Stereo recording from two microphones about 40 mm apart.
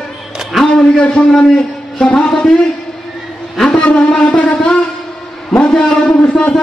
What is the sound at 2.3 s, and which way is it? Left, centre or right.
Speech, centre.